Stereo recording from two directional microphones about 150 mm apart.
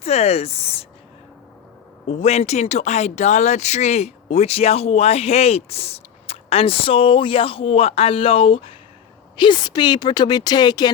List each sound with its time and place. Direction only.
0.0 s speech: 45° left (ahead or behind)
2.0 s speech: 45° left (ahead or behind); by 10.9 s 30° left (ahead or behind)